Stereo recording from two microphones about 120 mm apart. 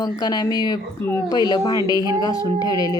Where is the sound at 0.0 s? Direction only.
35° left (ahead or behind).